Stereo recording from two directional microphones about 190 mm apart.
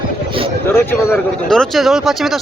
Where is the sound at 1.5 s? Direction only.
Centre (ahead or behind).